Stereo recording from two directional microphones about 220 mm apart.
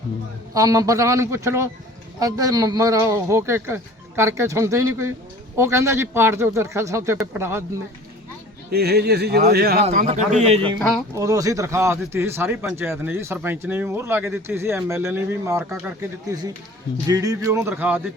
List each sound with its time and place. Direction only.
0.5 s speech: 15° right (ahead or behind)
8.7 s a man's voice: 45° right (ahead or behind); by 10.8 s 25° right (ahead or behind)
11.1 s speech: 15° right (ahead or behind)
17.1 s speech: 15° right (ahead or behind)